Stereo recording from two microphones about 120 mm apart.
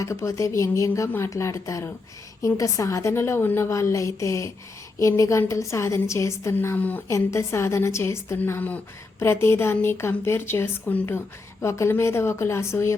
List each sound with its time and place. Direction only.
0.0 s a woman's voice: 25° left (ahead or behind)
7.1 s a woman's voice: 25° left (ahead or behind)